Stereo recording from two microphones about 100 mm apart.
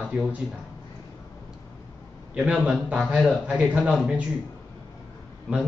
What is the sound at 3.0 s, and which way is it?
Speech, centre (ahead or behind).